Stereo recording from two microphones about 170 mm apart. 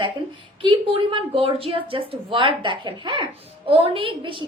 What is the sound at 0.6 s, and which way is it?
A woman's voice, 30° right (ahead or behind).